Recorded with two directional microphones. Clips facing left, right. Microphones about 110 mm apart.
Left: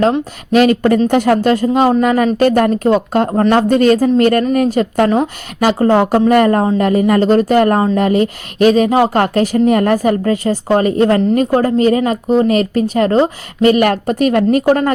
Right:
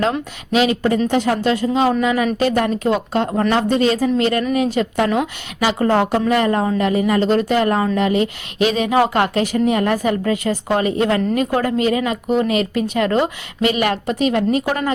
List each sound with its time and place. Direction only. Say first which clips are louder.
0.5 s speech: left 6 dB; 50° left (ahead or behind)